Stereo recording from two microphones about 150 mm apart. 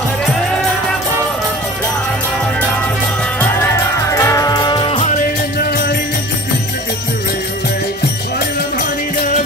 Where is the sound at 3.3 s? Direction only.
20° left (ahead or behind).